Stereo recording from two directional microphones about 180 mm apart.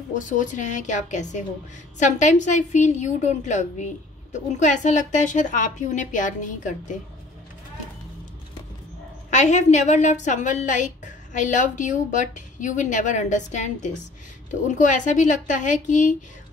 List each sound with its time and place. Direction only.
0.1 s a woman's voice: 45° left (ahead or behind)
9.3 s a woman's voice: 40° left (ahead or behind)